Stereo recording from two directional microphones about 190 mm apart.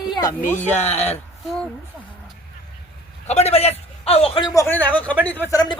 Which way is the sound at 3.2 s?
35° left (ahead or behind).